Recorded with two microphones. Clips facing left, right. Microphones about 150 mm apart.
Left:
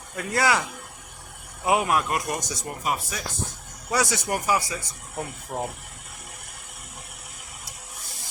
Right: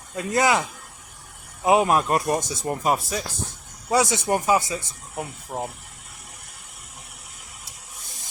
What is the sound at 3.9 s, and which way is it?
Speech, 25° right (ahead or behind).